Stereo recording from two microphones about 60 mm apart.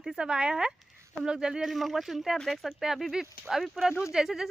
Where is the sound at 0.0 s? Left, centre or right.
Centre.